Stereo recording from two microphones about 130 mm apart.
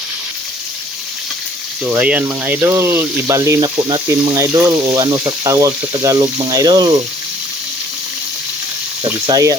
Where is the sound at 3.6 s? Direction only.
35° right (ahead or behind).